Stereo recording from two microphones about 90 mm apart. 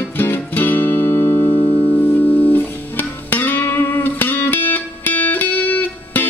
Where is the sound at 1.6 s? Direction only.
45° left (ahead or behind).